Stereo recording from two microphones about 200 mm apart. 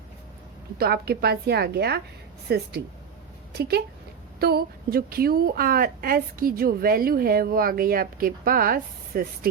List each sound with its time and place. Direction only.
0.8 s a woman's voice: 50° right (ahead or behind)